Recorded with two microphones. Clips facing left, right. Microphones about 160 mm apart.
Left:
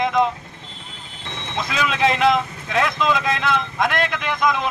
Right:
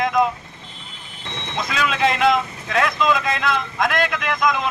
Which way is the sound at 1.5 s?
Centre (ahead or behind).